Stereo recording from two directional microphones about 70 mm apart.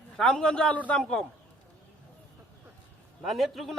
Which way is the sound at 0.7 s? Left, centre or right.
Left.